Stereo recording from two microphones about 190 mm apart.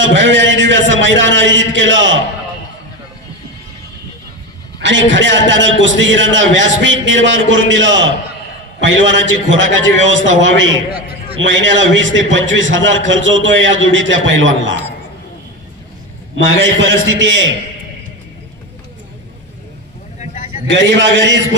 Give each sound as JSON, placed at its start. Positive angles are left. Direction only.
{"t": 0.0, "sound": "a man's voice", "side_deg": -70}
{"t": 4.7, "sound": "a man's voice", "side_deg": -75}
{"t": 10.9, "sound": "a sound", "side_deg": -30}
{"t": 11.4, "sound": "a man's voice", "side_deg": -75}
{"t": 16.3, "sound": "a man's voice", "side_deg": -75}
{"t": 20.6, "sound": "a man's voice", "side_deg": -70}